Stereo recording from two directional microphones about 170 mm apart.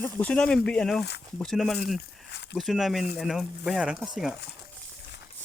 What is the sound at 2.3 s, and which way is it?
Speech, 90° left.